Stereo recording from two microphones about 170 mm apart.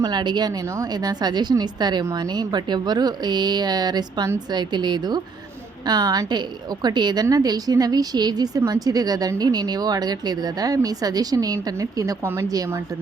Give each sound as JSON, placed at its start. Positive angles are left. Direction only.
{"t": 0.0, "sound": "a woman's voice", "side_deg": -25}